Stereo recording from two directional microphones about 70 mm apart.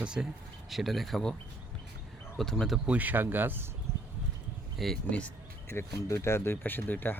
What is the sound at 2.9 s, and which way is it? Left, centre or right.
Speech, right.